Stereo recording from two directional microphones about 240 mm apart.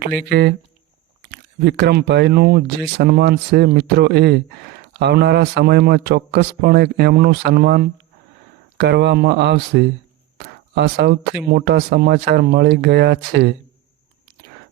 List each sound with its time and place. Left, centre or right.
0.3 s speech: right